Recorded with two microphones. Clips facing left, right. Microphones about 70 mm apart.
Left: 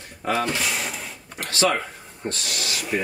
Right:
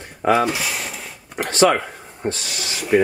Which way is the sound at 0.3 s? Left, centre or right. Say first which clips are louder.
Right 7 dB; centre.